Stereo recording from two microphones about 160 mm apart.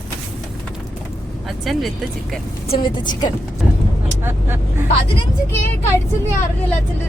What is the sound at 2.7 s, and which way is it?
Speech, 30° left (ahead or behind).